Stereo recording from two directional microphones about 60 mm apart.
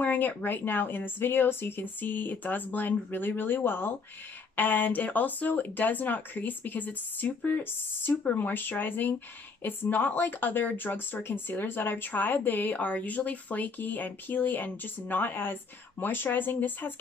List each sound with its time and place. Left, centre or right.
0.0 s speech: left